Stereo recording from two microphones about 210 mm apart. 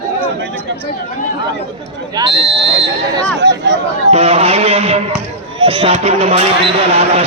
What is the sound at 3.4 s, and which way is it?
Speech, 55° right (ahead or behind).